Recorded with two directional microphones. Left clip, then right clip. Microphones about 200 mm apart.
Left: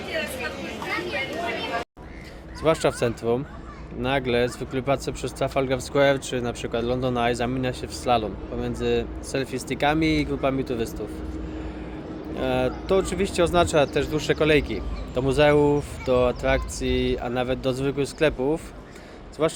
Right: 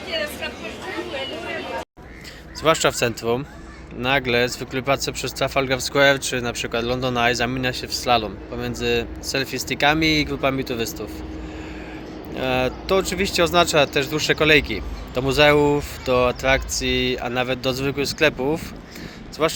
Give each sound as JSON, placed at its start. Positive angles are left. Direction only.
{"t": 2.6, "sound": "speech", "side_deg": 0}
{"t": 12.4, "sound": "speech", "side_deg": 0}